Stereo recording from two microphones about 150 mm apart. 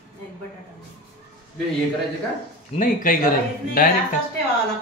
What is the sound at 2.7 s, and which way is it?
Speech, 65° left (ahead or behind).